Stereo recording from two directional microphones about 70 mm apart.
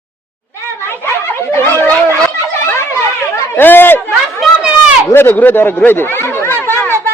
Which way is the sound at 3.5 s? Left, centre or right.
Left.